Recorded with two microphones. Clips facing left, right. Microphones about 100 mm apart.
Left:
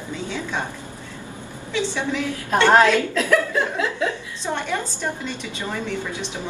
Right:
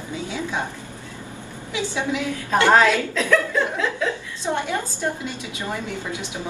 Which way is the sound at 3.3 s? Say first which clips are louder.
Right 1 dB; 15° left (ahead or behind).